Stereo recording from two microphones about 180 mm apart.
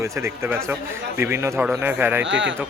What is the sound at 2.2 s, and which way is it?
Speech, 90° right.